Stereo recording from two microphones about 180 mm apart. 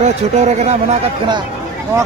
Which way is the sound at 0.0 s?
40° right (ahead or behind).